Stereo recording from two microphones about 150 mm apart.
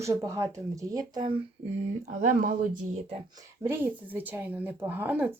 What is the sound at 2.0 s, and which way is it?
Speech, 55° right (ahead or behind).